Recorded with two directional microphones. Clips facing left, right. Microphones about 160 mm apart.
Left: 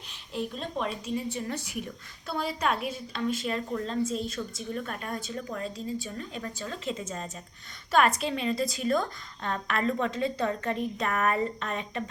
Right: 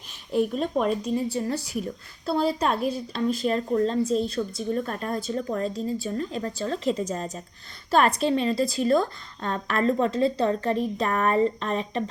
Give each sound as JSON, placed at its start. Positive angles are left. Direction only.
{"t": 0.3, "sound": "speech", "side_deg": -50}